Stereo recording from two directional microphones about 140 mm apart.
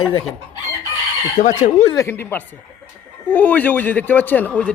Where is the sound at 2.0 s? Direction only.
15° left (ahead or behind).